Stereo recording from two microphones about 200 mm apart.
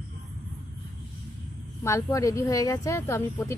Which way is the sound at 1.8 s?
15° left (ahead or behind).